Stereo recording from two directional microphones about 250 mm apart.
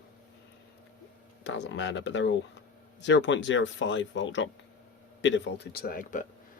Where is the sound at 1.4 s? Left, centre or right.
Left.